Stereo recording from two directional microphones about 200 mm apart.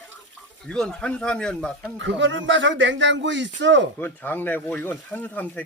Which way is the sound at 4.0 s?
10° left (ahead or behind).